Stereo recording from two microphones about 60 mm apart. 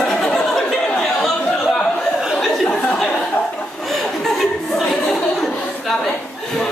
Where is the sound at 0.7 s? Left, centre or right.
Centre.